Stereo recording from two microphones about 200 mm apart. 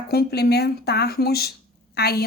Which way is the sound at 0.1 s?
55° left (ahead or behind).